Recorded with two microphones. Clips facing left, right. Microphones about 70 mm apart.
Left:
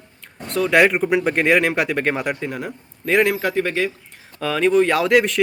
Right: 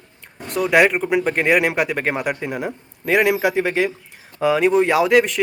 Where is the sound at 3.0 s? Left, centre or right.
Centre.